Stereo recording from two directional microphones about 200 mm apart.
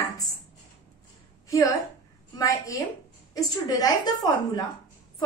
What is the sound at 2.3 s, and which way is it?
A woman's voice, 15° left (ahead or behind).